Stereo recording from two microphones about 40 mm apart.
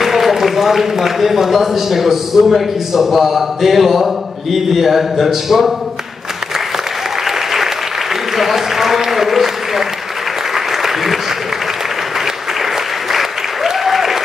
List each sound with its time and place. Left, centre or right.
0.0 s a man's voice: centre
7.2 s applause: centre
13.1 s applause: centre